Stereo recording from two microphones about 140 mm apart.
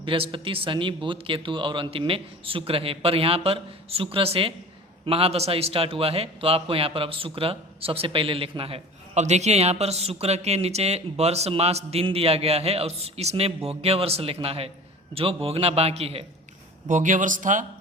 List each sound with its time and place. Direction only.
0.0 s a man's voice: 40° right (ahead or behind)
16.9 s speech: 65° right (ahead or behind)